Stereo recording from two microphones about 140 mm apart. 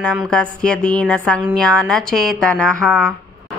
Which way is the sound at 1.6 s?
5° left (ahead or behind).